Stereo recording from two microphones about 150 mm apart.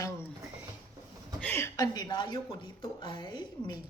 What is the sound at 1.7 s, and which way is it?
Speech, 25° left (ahead or behind).